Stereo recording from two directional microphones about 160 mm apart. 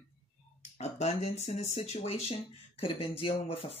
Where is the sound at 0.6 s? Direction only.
45° left (ahead or behind).